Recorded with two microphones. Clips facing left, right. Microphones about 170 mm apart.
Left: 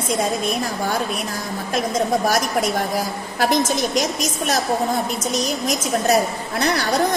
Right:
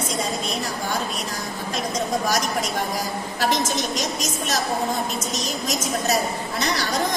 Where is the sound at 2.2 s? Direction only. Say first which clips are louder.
Left 4 dB; 50° left (ahead or behind).